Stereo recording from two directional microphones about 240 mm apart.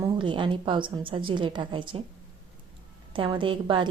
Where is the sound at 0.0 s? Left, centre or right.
Centre.